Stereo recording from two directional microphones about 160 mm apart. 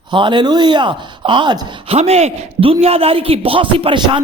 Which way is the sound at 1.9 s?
40° right (ahead or behind).